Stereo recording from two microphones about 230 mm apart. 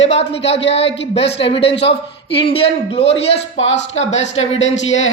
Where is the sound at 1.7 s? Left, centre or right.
Left.